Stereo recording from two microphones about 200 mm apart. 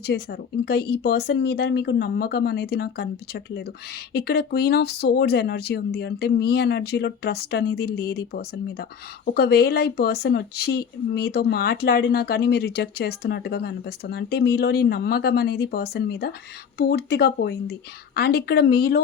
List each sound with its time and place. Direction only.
0.1 s speech: 60° left (ahead or behind)